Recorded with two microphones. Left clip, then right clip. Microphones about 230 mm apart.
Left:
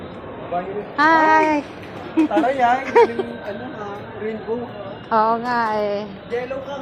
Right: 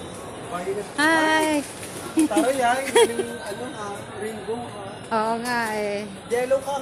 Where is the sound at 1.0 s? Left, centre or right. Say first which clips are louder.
Left 6 dB; centre.